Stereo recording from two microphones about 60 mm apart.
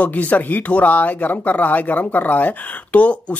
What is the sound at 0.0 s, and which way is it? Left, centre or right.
Speech, left.